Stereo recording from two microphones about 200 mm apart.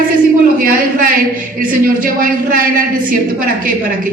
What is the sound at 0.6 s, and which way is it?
A woman's voice, 45° right (ahead or behind).